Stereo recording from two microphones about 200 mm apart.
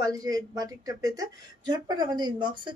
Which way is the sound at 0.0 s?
20° right (ahead or behind).